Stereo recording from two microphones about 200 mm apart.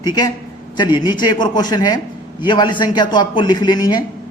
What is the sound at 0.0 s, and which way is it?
A man's voice, 20° left (ahead or behind).